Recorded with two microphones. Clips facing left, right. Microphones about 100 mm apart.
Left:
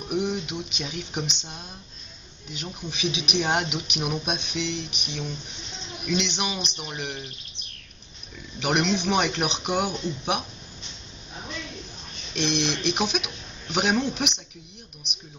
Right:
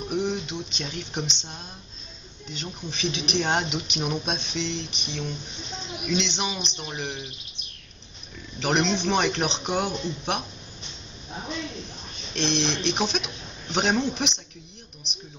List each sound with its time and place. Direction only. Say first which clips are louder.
0.1 s speech: left 1 dB; 5° left (ahead or behind)
8.5 s speech: even; 5° left (ahead or behind)
12.4 s speech: even; 10° left (ahead or behind)